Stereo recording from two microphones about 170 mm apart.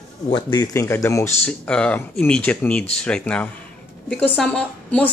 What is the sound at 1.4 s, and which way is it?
A woman's voice, 5° left (ahead or behind).